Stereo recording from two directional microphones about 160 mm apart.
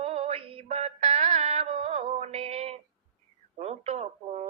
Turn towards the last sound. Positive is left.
turn(degrees=-40)  # may be behind; listen again after turning